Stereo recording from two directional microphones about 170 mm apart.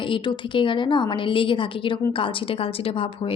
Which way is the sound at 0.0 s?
30° left (ahead or behind).